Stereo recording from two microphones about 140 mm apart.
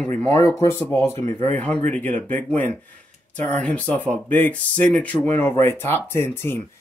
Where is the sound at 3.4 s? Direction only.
10° left (ahead or behind).